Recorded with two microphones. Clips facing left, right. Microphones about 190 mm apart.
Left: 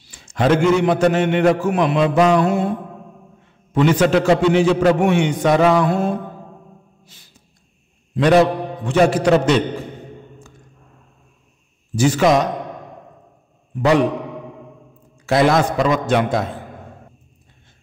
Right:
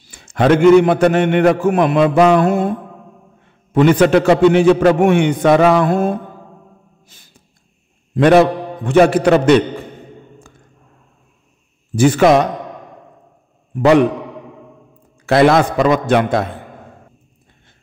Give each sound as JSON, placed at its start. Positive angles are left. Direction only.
{"t": 0.0, "sound": "a man's voice", "side_deg": -55}
{"t": 3.7, "sound": "a man's voice", "side_deg": -55}
{"t": 8.1, "sound": "a man's voice", "side_deg": -55}
{"t": 11.9, "sound": "a man's voice", "side_deg": -55}
{"t": 15.2, "sound": "a man's voice", "side_deg": -60}